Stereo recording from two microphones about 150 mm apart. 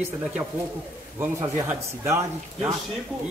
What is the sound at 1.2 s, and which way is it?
Speech, 15° right (ahead or behind).